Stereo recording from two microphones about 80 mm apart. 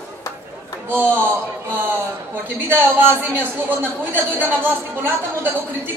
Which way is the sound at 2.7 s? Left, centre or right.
Right.